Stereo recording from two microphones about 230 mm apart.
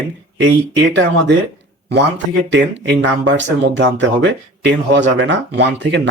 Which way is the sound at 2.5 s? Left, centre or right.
Right.